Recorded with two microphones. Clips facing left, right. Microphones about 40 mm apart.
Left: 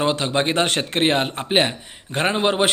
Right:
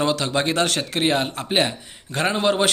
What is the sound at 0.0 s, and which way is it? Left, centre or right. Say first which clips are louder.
A man's voice: left 1 dB; left.